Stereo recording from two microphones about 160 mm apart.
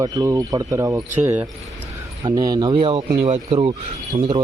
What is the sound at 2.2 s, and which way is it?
Speech, 25° right (ahead or behind).